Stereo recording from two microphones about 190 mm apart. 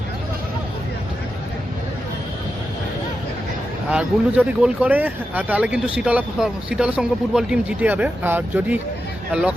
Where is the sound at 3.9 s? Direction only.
5° right (ahead or behind).